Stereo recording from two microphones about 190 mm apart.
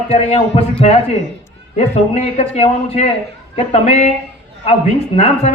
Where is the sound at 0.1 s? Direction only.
35° left (ahead or behind).